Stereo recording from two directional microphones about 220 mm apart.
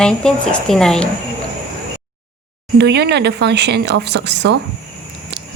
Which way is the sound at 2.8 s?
50° right (ahead or behind).